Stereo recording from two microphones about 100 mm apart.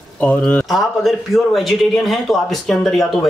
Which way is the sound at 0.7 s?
Centre (ahead or behind).